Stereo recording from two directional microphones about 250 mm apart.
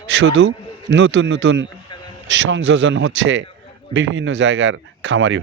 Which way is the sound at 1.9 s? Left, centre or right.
Centre.